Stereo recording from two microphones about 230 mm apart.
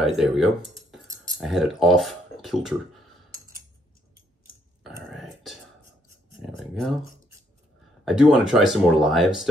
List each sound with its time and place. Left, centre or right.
0.0 s speech: centre
0.9 s cutlery: centre
4.8 s burping: centre
6.4 s a sound: centre
8.0 s speech: centre